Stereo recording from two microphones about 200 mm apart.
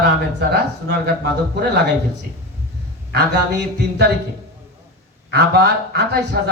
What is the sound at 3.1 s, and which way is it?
Speech, 55° right (ahead or behind).